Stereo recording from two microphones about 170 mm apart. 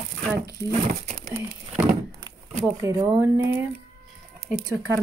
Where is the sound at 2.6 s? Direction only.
20° right (ahead or behind).